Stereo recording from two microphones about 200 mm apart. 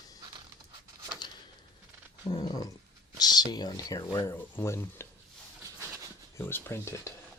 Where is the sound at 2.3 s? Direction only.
20° left (ahead or behind).